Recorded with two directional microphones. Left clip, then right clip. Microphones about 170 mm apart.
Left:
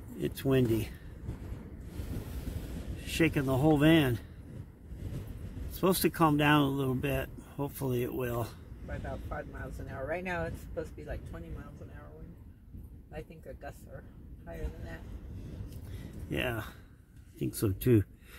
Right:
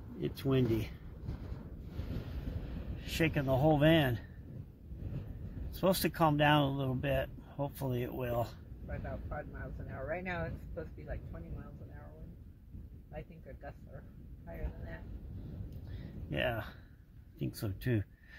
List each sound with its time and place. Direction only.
0.4 s speech: 20° left (ahead or behind)
3.0 s speech: 5° left (ahead or behind)
5.8 s speech: centre (ahead or behind)
10.0 s speech: 70° left (ahead or behind)
16.3 s speech: centre (ahead or behind)